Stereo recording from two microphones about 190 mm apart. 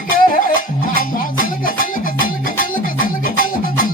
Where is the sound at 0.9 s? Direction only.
45° left (ahead or behind).